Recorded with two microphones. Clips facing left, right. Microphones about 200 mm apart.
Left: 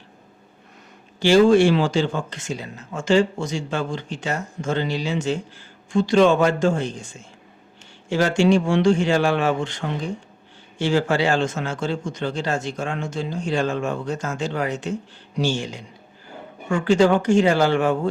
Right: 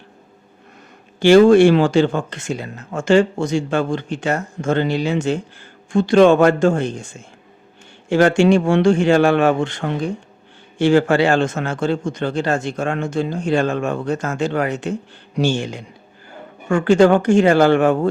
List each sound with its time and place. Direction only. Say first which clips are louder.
1.2 s a man's voice: right 5 dB; 55° right (ahead or behind)